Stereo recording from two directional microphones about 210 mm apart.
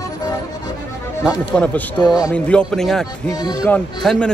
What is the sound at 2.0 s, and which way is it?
Speech, 20° left (ahead or behind).